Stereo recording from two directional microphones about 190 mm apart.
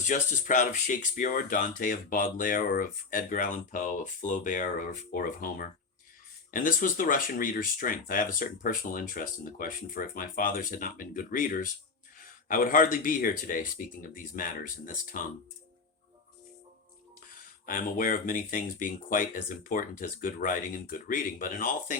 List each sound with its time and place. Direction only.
0.1 s speech: 40° left (ahead or behind)
17.7 s speech: 45° left (ahead or behind)